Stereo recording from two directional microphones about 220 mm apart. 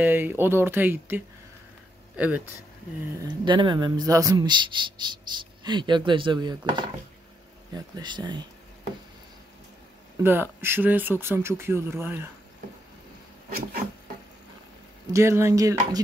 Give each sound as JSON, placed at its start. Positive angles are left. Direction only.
{"t": 0.0, "sound": "speech", "side_deg": -10}
{"t": 3.2, "sound": "speech", "side_deg": -20}
{"t": 10.2, "sound": "speech", "side_deg": -10}
{"t": 15.1, "sound": "speech", "side_deg": -10}